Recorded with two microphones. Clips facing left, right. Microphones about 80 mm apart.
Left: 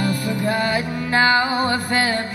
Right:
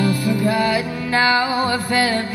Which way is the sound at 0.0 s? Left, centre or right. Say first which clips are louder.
Right 3 dB; left.